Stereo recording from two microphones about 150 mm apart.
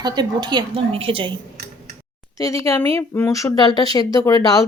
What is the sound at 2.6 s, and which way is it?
Speech, 20° left (ahead or behind).